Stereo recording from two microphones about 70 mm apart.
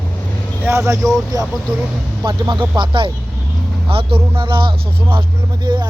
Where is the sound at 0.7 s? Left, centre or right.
Right.